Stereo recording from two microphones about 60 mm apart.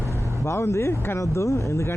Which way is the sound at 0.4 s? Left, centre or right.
Left.